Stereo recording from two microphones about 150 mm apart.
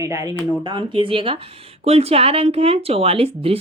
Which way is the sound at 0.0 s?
20° right (ahead or behind).